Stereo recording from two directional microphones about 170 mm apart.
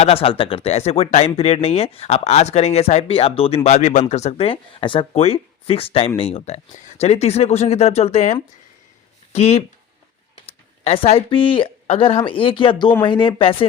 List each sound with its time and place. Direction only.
0.0 s a woman's voice: 35° left (ahead or behind)